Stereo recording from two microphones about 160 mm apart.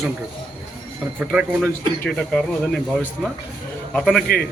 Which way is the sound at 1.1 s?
10° right (ahead or behind).